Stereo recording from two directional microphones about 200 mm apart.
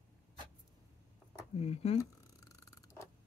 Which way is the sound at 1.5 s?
30° left (ahead or behind).